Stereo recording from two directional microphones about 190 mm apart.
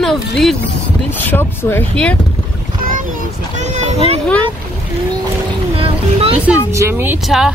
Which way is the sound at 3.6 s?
35° right (ahead or behind).